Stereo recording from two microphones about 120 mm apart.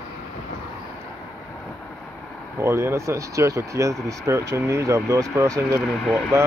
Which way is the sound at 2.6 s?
20° right (ahead or behind).